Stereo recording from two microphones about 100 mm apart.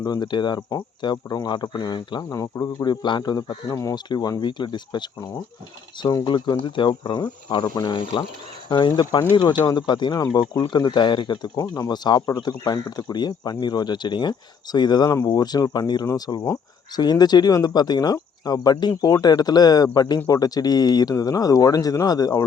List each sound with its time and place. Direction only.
0.0 s speech: 45° left (ahead or behind)
2.3 s speech: 35° left (ahead or behind); by 8.2 s 50° left (ahead or behind)
9.3 s speech: 50° left (ahead or behind)